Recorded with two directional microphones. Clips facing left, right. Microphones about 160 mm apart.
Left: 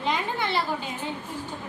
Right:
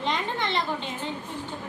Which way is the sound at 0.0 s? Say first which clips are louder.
Left 1 dB; 5° left (ahead or behind).